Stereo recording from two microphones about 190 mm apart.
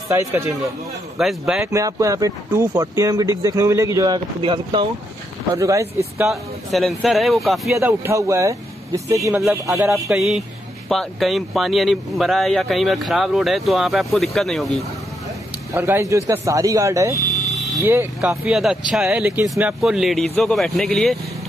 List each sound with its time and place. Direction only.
1.1 s speech: centre (ahead or behind)
1.6 s speech: 15° right (ahead or behind)
6.2 s speech: centre (ahead or behind)
7.7 s speech: 15° right (ahead or behind)
9.3 s speech: 5° right (ahead or behind)
9.7 s speech: 15° right (ahead or behind)
10.0 s speech: centre (ahead or behind)
15.7 s speech: 10° right (ahead or behind)